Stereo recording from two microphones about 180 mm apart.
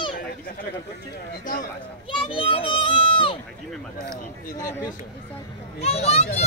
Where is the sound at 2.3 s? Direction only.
30° left (ahead or behind).